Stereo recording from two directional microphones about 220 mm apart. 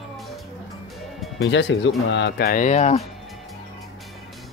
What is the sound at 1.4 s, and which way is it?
Speech, 55° left (ahead or behind).